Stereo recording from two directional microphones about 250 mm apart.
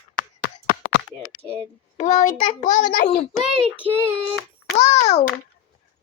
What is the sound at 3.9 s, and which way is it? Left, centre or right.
Child singing, centre.